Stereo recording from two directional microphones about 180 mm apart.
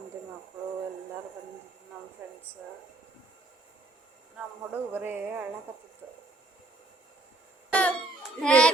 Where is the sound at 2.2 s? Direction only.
10° right (ahead or behind).